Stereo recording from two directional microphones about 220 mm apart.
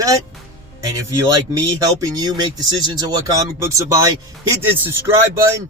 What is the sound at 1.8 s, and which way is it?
Speech, 15° right (ahead or behind).